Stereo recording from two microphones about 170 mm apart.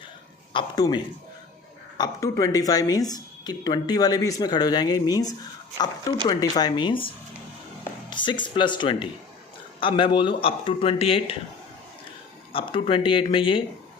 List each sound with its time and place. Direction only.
0.5 s speech: 25° left (ahead or behind)
8.1 s a man's voice: 30° left (ahead or behind)
12.5 s speech: 30° left (ahead or behind)